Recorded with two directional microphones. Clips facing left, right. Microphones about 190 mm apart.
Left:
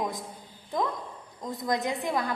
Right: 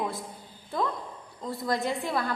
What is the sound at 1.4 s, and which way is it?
Speech, 15° left (ahead or behind).